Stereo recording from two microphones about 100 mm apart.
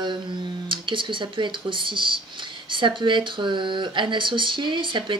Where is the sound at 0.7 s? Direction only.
55° right (ahead or behind).